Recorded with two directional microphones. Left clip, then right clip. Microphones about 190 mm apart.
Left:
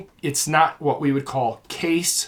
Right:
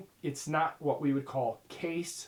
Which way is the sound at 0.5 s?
15° left (ahead or behind).